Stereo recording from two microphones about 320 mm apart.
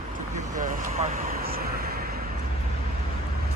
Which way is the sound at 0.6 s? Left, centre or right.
Right.